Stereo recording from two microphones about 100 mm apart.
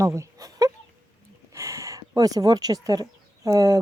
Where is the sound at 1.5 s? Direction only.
30° right (ahead or behind).